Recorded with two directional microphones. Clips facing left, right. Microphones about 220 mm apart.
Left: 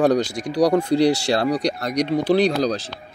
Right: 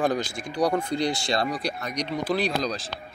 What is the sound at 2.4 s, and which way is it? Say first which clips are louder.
Speech: left 8 dB; 35° left (ahead or behind).